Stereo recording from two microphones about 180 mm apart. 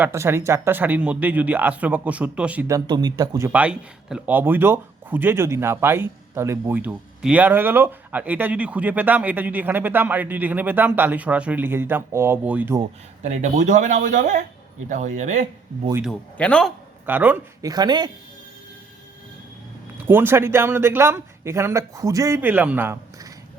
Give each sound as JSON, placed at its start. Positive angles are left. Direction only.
{"t": 0.0, "sound": "speech", "side_deg": -15}
{"t": 3.5, "sound": "speech", "side_deg": -5}
{"t": 13.2, "sound": "speech", "side_deg": -40}
{"t": 16.4, "sound": "a man's voice", "side_deg": 5}
{"t": 17.1, "sound": "speech", "side_deg": -10}
{"t": 17.6, "sound": "speech", "side_deg": -20}
{"t": 20.1, "sound": "speech", "side_deg": -10}